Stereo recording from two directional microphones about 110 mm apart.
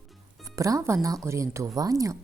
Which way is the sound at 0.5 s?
30° right (ahead or behind).